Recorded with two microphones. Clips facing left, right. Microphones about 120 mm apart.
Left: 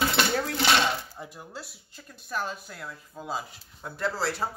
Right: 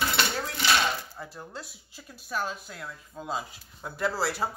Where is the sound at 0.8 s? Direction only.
15° left (ahead or behind).